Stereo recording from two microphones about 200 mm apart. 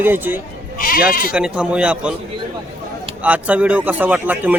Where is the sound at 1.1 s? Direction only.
45° left (ahead or behind).